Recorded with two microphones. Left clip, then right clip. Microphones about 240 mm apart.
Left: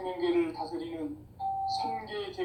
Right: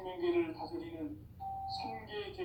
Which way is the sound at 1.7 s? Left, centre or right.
Left.